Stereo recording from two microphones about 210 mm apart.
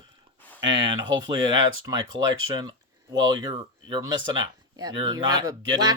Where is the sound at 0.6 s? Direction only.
20° right (ahead or behind).